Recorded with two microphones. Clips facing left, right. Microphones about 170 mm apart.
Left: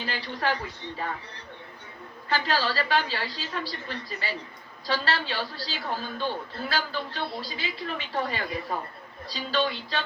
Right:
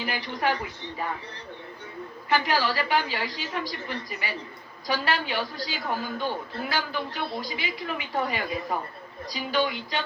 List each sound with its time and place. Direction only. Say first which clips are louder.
0.0 s a man's voice: right 2 dB; 15° right (ahead or behind)
2.3 s a man's voice: right 2 dB; 15° right (ahead or behind)